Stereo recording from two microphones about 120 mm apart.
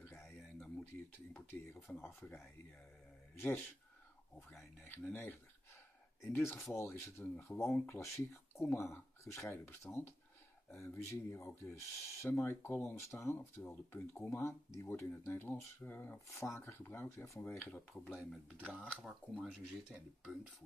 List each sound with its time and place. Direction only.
0.2 s a sound: centre (ahead or behind)
1.3 s speech: 20° left (ahead or behind)
18.1 s speech: 5° right (ahead or behind)